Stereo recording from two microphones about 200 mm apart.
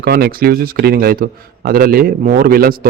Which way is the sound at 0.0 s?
50° right (ahead or behind).